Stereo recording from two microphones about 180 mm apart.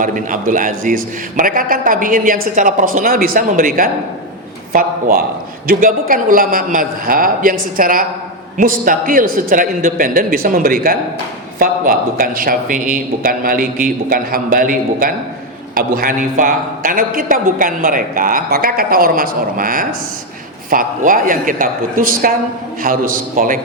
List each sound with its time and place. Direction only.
0.0 s a man's voice: 45° right (ahead or behind)